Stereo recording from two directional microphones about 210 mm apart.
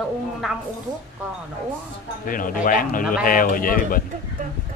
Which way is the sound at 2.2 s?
40° left (ahead or behind).